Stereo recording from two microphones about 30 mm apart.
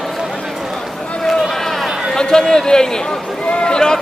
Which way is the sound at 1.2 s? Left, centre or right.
Centre.